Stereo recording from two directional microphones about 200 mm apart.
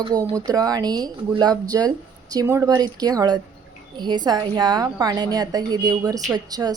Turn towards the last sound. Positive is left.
turn(degrees=-20)  # may be behind; listen again after turning